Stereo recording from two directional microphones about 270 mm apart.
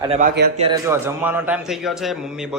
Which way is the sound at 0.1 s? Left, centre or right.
Right.